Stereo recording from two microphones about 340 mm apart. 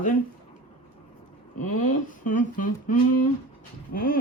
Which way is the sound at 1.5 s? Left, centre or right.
Left.